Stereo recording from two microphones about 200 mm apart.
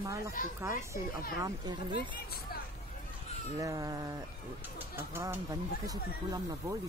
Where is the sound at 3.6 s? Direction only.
15° right (ahead or behind).